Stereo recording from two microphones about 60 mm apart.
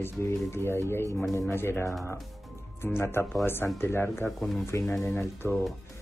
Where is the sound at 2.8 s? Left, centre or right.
Left.